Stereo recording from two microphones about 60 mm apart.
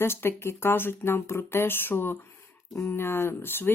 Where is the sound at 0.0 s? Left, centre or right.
Left.